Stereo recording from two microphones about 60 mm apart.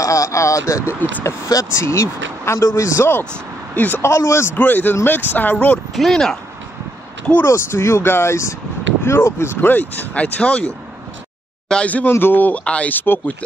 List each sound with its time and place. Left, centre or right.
0.0 s speech: left
3.7 s speech: left
4.0 s speech: left
4.6 s speech: left
5.9 s speech: centre
7.4 s speech: left
9.7 s speech: left
11.7 s speech: left
12.1 s a man's voice: left
12.6 s speech: centre
12.9 s a man's voice: left